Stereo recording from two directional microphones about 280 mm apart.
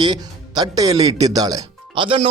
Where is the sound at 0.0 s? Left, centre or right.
Centre.